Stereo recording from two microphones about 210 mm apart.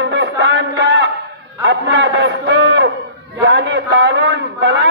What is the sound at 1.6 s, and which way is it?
A man's voice, 60° right (ahead or behind).